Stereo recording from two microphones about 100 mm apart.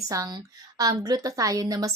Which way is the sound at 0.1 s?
40° right (ahead or behind).